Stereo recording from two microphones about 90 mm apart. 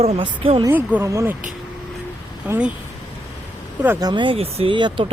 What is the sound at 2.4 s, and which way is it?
Speech, 15° right (ahead or behind).